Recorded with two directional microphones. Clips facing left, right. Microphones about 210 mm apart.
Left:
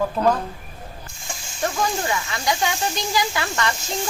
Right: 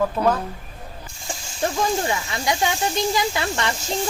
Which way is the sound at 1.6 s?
25° right (ahead or behind).